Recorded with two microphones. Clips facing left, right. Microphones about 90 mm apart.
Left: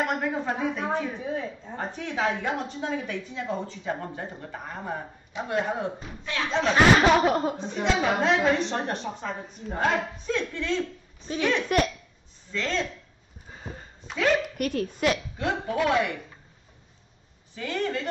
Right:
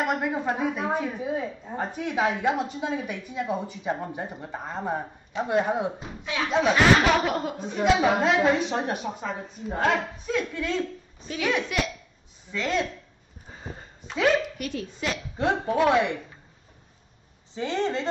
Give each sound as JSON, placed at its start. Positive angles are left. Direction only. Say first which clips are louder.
{"t": 0.0, "sound": "a woman's voice", "louder": "right 1 dB", "side_deg": -10}
{"t": 6.7, "sound": "speech", "louder": "left 2 dB", "side_deg": 30}
{"t": 7.5, "sound": "a woman's voice", "louder": "right 4 dB", "side_deg": -5}
{"t": 11.7, "sound": "speech", "louder": "left 5 dB", "side_deg": 45}
{"t": 12.4, "sound": "a woman's voice", "louder": "right 2 dB", "side_deg": -10}
{"t": 14.1, "sound": "a woman's voice", "louder": "right 2 dB", "side_deg": 5}
{"t": 14.6, "sound": "speech", "louder": "left 5 dB", "side_deg": 50}
{"t": 15.3, "sound": "speech", "louder": "right 3 dB", "side_deg": -25}
{"t": 17.6, "sound": "speech", "louder": "right 2 dB", "side_deg": -25}